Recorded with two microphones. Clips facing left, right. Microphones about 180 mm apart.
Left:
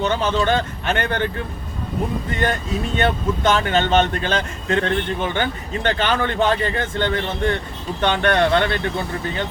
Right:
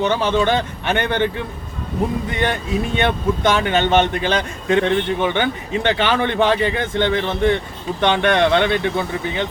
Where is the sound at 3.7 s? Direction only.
10° right (ahead or behind).